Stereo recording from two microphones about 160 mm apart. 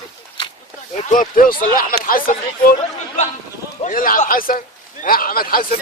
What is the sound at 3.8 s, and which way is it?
Speech, 60° left (ahead or behind).